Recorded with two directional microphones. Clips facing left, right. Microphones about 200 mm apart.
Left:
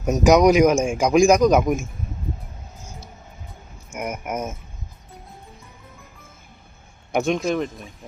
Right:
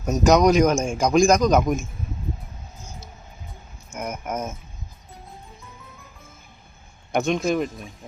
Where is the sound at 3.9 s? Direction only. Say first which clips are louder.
Left 1 dB; 10° left (ahead or behind).